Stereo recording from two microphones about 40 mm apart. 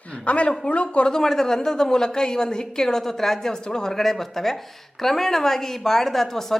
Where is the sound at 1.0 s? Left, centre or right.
Centre.